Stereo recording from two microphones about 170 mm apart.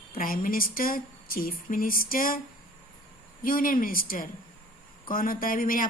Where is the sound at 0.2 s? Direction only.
55° left (ahead or behind).